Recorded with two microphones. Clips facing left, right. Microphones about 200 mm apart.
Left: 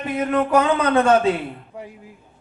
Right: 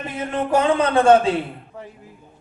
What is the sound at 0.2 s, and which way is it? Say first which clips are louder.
A man's voice: left 2 dB; 30° right (ahead or behind).